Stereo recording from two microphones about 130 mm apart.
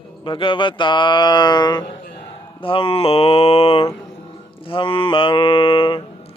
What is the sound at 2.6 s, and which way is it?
Mantra, 45° left (ahead or behind).